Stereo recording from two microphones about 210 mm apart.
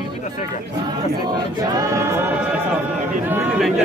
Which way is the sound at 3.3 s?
5° right (ahead or behind).